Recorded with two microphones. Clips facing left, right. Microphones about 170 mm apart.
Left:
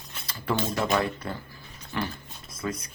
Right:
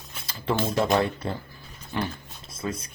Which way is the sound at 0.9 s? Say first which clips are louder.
Right 3 dB; 30° right (ahead or behind).